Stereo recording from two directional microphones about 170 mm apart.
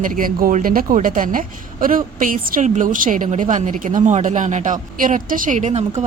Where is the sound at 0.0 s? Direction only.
55° right (ahead or behind).